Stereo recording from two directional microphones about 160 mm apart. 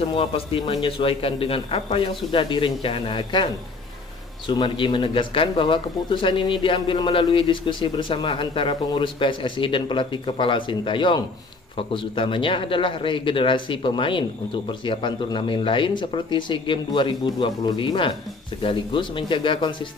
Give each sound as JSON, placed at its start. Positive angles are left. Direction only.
{"t": 0.0, "sound": "speech", "side_deg": 35}
{"t": 4.5, "sound": "speech", "side_deg": 30}